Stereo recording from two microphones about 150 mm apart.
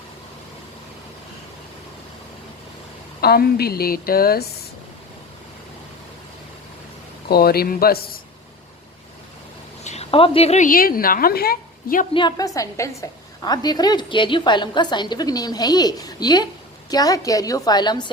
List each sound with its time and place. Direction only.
3.2 s a woman's voice: 90° left
7.3 s a woman's voice: 90° left
9.8 s a woman's voice: 45° left (ahead or behind)
10.7 s a woman's voice: 75° left (ahead or behind)
12.1 s a woman's voice: 30° left (ahead or behind)